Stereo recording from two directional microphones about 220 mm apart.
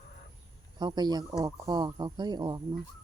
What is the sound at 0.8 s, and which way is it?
Speech, 20° right (ahead or behind).